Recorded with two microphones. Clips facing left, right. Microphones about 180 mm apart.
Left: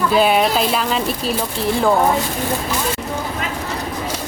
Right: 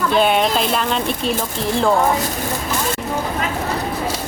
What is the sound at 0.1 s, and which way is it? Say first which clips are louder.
Speech: even; 5° left (ahead or behind).